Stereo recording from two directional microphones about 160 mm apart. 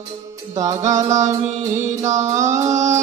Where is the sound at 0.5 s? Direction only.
20° right (ahead or behind).